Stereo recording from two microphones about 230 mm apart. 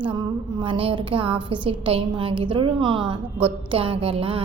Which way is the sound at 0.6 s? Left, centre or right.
Right.